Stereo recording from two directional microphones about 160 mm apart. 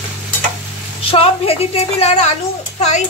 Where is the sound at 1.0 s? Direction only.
35° left (ahead or behind).